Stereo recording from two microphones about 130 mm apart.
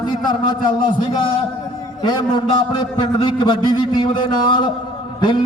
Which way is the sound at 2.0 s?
35° left (ahead or behind).